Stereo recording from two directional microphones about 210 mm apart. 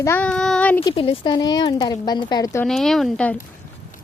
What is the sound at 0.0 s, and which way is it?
Child singing, 10° left (ahead or behind).